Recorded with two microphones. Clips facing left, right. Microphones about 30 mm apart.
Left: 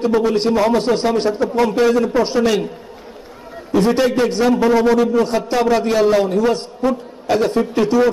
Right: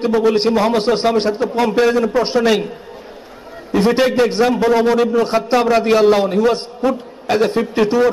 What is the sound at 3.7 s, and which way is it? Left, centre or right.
Speech, right.